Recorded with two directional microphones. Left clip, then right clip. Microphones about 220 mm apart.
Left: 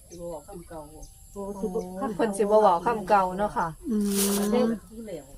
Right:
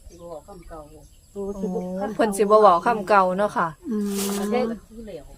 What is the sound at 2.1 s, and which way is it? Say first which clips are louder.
A woman's voice: right 5 dB; 55° right (ahead or behind).